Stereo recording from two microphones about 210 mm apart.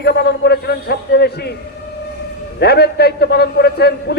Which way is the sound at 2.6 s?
50° left (ahead or behind).